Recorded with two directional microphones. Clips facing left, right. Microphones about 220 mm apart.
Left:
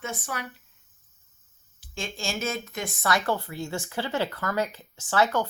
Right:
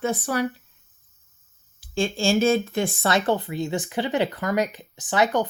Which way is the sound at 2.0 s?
30° right (ahead or behind).